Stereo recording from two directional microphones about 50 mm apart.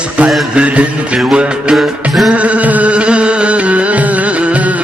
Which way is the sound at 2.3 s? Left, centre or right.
Right.